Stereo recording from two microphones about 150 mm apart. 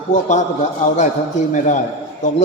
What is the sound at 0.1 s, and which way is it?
A man's voice, 55° left (ahead or behind).